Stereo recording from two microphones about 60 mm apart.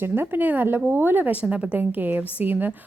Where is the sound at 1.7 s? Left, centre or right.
Right.